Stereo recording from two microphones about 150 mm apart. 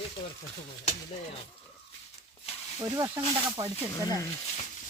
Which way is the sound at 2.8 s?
20° right (ahead or behind).